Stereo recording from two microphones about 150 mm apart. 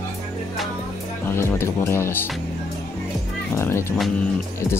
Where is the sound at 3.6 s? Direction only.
15° left (ahead or behind).